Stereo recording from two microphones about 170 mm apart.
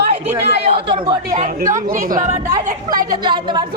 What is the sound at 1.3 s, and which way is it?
A woman's voice, 50° right (ahead or behind).